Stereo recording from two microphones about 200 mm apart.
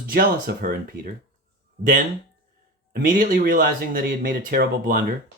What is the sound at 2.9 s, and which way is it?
Speech, 45° right (ahead or behind).